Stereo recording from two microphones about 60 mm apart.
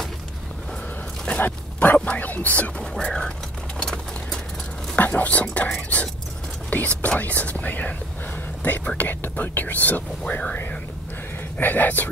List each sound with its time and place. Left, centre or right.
1.4 s dog: left
2.1 s speech: left
2.8 s speech: centre
3.8 s a sound: centre
4.9 s speech: left